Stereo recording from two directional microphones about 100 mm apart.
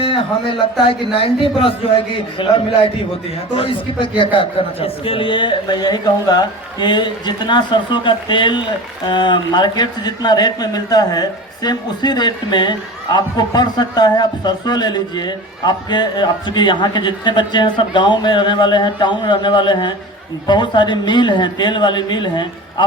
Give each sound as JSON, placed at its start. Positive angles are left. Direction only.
{"t": 0.0, "sound": "a man's voice", "side_deg": 60}